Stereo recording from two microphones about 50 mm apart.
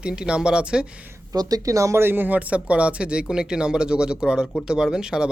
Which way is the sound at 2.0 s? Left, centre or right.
Right.